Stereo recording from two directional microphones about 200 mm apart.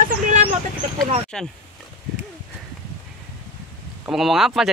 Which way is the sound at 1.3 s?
5° left (ahead or behind).